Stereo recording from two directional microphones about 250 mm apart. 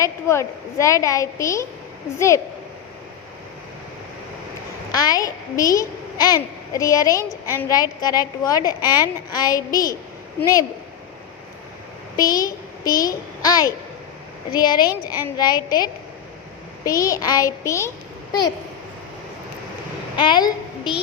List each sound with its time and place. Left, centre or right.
0.0 s a woman's voice: centre
4.9 s a child's voice: centre
7.3 s a woman's voice: centre
7.7 s a woman's voice: centre
12.1 s a child's voice: centre
20.1 s a woman's voice: centre